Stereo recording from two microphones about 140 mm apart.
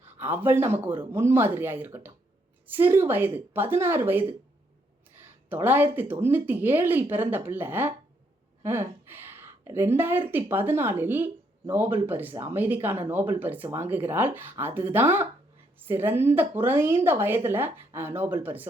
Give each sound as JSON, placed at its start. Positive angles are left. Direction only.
{"t": 0.0, "sound": "speech", "side_deg": -15}
{"t": 5.5, "sound": "a woman's voice", "side_deg": -15}